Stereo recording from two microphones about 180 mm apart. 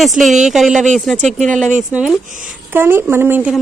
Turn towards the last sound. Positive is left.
turn(degrees=-10)  # may be behind; listen again after turning